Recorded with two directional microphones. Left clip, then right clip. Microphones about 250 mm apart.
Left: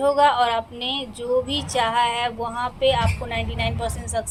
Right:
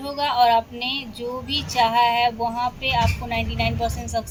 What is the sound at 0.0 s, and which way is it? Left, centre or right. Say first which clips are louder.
Speech: left 2 dB; left.